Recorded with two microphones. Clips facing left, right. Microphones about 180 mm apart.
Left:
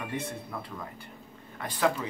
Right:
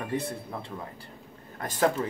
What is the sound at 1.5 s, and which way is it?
Speech, 45° right (ahead or behind).